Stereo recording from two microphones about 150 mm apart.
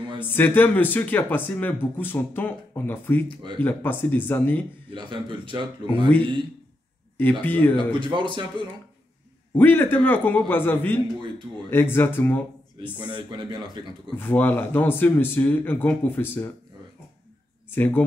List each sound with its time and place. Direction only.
0.2 s speech: 15° left (ahead or behind)
4.9 s speech: 30° right (ahead or behind)
7.2 s speech: 10° left (ahead or behind)
7.9 s speech: 35° right (ahead or behind)
9.5 s speech: 15° left (ahead or behind)
13.0 s speech: 30° right (ahead or behind)
14.1 s speech: 10° left (ahead or behind)
17.6 s speech: 15° left (ahead or behind)